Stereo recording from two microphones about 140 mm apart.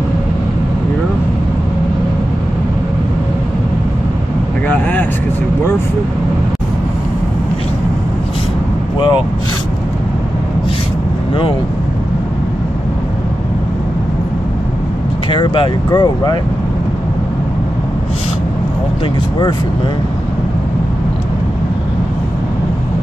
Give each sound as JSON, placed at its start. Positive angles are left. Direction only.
{"t": 4.6, "sound": "vehicle", "side_deg": 10}
{"t": 15.2, "sound": "speech", "side_deg": 35}